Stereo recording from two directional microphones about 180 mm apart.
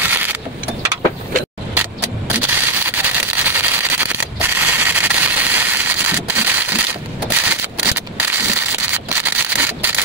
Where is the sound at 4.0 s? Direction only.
10° right (ahead or behind).